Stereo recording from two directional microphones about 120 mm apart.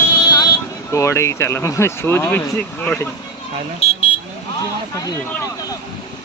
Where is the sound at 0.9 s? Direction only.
25° left (ahead or behind).